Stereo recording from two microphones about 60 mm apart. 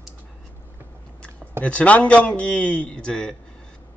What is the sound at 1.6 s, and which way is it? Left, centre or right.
A man's voice, left.